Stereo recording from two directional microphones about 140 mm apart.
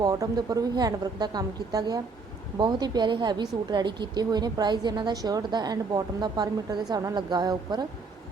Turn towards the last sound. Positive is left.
turn(degrees=-30)  # may be behind; listen again after turning